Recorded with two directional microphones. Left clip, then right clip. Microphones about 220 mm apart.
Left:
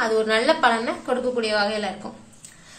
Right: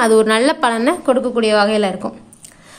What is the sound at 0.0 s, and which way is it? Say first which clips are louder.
A woman's voice: right 8 dB; 45° right (ahead or behind).